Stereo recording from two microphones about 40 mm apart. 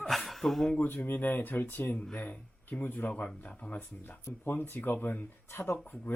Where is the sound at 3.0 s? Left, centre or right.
Left.